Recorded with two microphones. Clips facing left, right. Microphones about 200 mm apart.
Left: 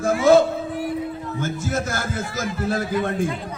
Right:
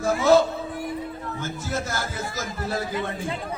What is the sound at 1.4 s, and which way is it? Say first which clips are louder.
Speech: left 5 dB; 50° left (ahead or behind).